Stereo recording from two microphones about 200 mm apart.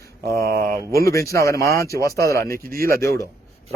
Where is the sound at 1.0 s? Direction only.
15° left (ahead or behind).